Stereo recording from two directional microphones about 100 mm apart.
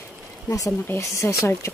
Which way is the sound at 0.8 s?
25° left (ahead or behind).